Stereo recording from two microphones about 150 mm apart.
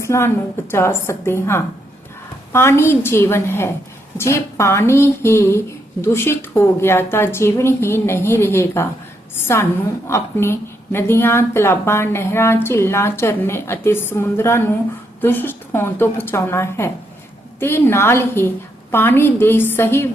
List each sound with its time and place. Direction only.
0.0 s a woman's voice: 20° left (ahead or behind)
10.1 s speech: 15° left (ahead or behind)